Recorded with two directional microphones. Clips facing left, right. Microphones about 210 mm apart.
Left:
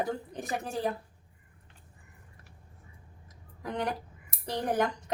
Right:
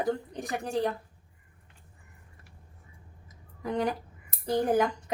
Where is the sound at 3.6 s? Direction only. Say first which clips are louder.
Right 4 dB; centre (ahead or behind).